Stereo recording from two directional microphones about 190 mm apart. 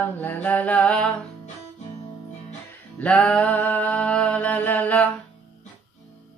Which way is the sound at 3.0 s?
5° left (ahead or behind).